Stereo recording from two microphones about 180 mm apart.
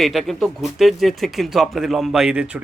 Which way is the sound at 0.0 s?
Centre (ahead or behind).